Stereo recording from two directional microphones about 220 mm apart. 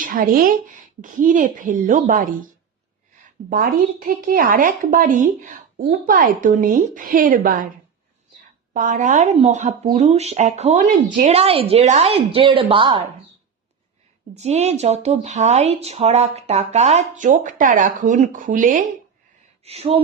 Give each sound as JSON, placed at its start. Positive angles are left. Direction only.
{"t": 0.0, "sound": "a woman's voice", "side_deg": -40}
{"t": 3.5, "sound": "a woman's voice", "side_deg": -40}
{"t": 8.7, "sound": "a woman's voice", "side_deg": -35}
{"t": 14.3, "sound": "a woman's voice", "side_deg": -30}